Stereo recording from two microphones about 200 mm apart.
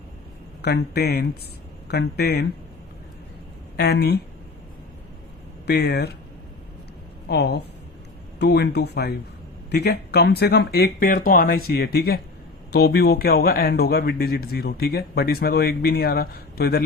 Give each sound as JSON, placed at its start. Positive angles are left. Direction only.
{"t": 0.6, "sound": "speech", "side_deg": 55}
{"t": 3.8, "sound": "speech", "side_deg": 55}
{"t": 5.6, "sound": "speech", "side_deg": 55}
{"t": 7.3, "sound": "speech", "side_deg": 55}